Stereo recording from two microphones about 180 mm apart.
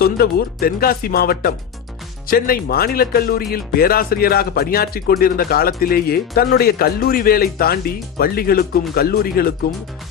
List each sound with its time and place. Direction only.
0.0 s speech: 60° left (ahead or behind)